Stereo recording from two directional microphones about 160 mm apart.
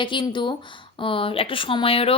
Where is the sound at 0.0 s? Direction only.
30° left (ahead or behind).